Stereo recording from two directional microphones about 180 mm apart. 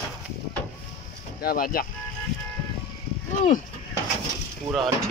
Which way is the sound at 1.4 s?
55° left (ahead or behind).